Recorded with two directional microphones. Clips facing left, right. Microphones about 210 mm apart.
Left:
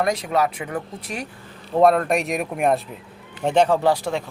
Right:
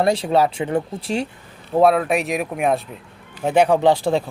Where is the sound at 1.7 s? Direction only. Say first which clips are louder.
Right 1 dB; 5° right (ahead or behind).